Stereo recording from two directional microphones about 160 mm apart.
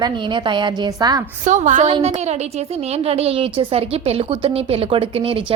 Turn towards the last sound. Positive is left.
turn(degrees=-35)  # may be behind; listen again after turning